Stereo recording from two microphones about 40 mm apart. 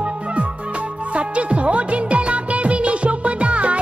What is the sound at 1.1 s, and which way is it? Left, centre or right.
Music, right.